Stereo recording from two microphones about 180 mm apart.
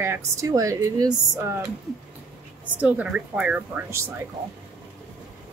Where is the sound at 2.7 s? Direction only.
5° right (ahead or behind).